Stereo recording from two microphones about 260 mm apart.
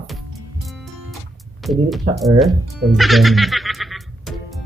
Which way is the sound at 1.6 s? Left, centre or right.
Centre.